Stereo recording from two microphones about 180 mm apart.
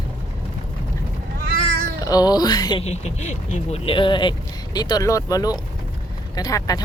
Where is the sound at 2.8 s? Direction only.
40° left (ahead or behind).